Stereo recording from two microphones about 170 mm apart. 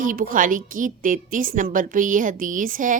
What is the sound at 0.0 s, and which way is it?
A woman's voice, 55° right (ahead or behind).